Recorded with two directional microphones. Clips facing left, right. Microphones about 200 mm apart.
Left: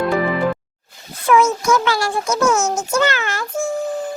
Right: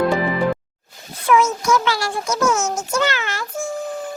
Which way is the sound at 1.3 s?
50° left (ahead or behind).